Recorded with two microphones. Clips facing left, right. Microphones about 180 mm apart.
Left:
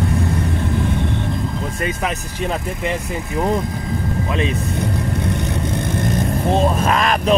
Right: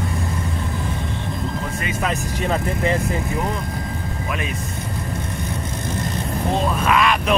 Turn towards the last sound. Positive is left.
turn(degrees=40)  # may be behind; listen again after turning